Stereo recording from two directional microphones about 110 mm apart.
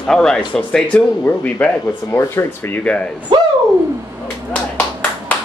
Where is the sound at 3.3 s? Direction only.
45° right (ahead or behind).